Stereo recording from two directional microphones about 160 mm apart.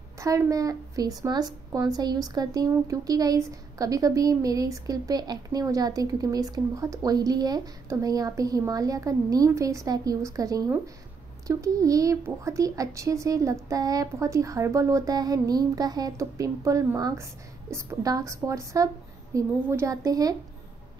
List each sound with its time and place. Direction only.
0.2 s a woman's voice: 20° right (ahead or behind)